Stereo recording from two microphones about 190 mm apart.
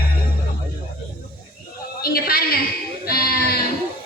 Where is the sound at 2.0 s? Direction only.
50° left (ahead or behind).